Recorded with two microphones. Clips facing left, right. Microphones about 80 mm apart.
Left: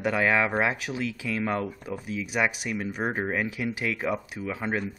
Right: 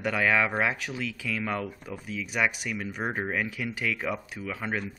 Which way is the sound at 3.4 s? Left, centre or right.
Left.